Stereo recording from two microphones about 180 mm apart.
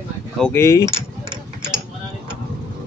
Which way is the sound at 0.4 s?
10° left (ahead or behind).